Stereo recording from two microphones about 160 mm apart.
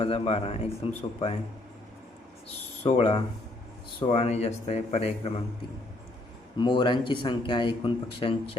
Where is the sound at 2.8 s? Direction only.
35° left (ahead or behind).